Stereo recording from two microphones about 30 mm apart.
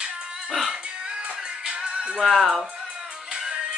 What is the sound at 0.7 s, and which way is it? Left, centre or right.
Music, right.